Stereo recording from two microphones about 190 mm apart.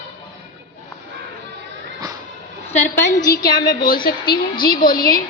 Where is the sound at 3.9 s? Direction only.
55° left (ahead or behind).